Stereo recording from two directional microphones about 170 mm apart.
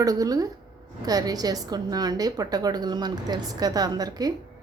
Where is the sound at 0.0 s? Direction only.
20° right (ahead or behind).